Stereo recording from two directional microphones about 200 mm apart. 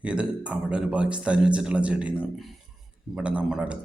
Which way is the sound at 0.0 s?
5° right (ahead or behind).